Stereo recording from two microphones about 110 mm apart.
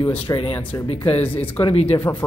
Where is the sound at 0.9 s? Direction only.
65° left (ahead or behind).